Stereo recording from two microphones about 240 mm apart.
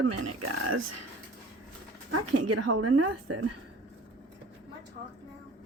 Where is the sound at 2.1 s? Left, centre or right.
Right.